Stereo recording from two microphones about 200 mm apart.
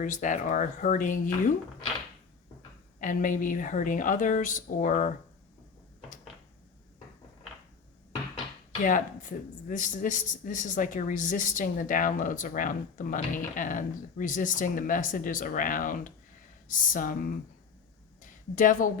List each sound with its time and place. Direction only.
0.0 s speech: 40° left (ahead or behind)
3.0 s speech: 40° left (ahead or behind)
9.6 s speech: 40° left (ahead or behind)
18.2 s a sound: 40° left (ahead or behind)